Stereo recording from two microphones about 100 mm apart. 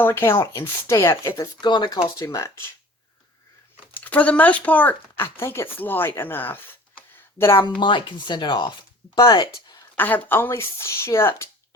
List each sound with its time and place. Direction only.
0.0 s speech: 25° left (ahead or behind)
1.6 s speech: 50° left (ahead or behind)
2.1 s speech: 35° left (ahead or behind)
4.0 s speech: 15° left (ahead or behind)
7.6 s speech: 50° left (ahead or behind)
10.2 s speech: 20° left (ahead or behind)